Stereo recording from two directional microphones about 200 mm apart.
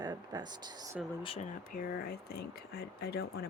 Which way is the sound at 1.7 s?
45° left (ahead or behind).